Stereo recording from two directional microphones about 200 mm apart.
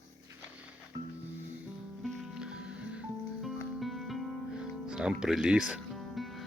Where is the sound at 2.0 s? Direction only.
Centre (ahead or behind).